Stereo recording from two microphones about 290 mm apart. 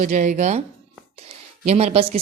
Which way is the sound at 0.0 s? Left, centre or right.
Right.